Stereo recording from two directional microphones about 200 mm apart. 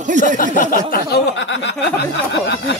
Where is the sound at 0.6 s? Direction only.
45° left (ahead or behind); by 1.8 s 60° left (ahead or behind).